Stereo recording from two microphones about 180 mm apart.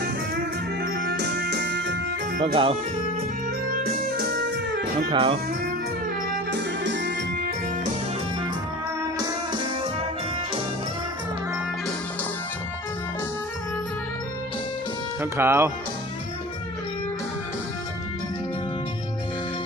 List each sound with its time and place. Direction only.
0.0 s music: 60° right (ahead or behind); by 2.0 s 75° right (ahead or behind)
2.4 s speech: 30° right (ahead or behind)
3.8 s music: 60° right (ahead or behind)
5.1 s speech: 30° right (ahead or behind)
6.5 s music: 75° right (ahead or behind)
9.1 s music: 25° right (ahead or behind)
15.2 s speech: 15° right (ahead or behind)